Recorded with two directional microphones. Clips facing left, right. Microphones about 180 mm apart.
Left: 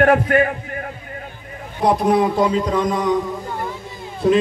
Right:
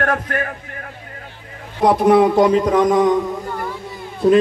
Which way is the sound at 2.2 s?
60° right (ahead or behind).